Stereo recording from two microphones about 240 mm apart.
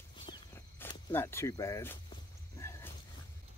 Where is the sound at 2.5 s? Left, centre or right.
Centre.